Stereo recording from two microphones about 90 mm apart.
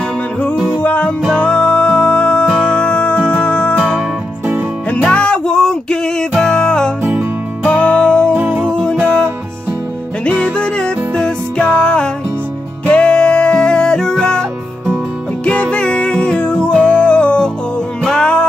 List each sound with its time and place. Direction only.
0.8 s music: 20° left (ahead or behind)
8.3 s music: 20° right (ahead or behind)
8.6 s music: 10° left (ahead or behind)
10.2 s music: 10° left (ahead or behind)
15.4 s music: 10° left (ahead or behind)